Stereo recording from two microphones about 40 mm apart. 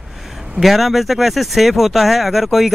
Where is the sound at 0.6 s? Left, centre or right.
Centre.